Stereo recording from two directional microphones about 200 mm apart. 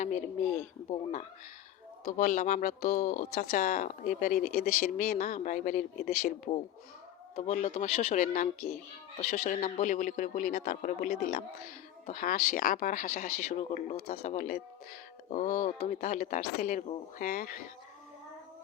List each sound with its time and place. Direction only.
0.0 s speech: 35° left (ahead or behind)